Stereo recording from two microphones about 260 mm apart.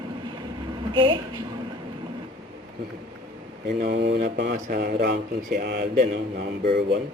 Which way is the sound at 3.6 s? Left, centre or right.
Right.